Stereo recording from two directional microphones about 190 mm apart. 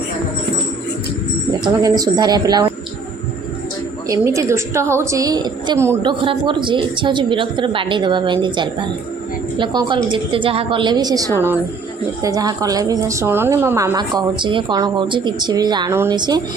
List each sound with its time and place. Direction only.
1.8 s a woman's voice: 20° right (ahead or behind)
4.1 s a woman's voice: 15° right (ahead or behind)
6.0 s a woman's voice: 25° right (ahead or behind)